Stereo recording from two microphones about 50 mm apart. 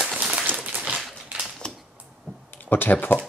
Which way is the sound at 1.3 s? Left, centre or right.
Right.